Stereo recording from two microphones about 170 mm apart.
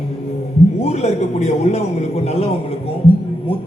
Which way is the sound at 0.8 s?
40° left (ahead or behind).